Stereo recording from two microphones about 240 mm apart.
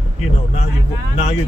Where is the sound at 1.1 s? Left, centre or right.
Left.